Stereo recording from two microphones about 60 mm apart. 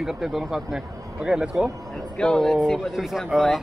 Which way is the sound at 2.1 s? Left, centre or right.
Centre.